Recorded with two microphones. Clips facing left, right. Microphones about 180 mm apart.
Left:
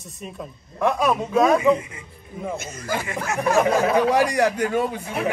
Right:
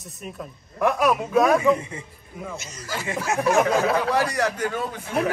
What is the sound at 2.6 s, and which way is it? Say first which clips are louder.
Speech: left 5 dB; 55° left (ahead or behind).